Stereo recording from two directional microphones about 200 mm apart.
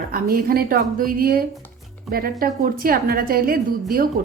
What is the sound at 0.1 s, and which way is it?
A woman's voice, 45° right (ahead or behind).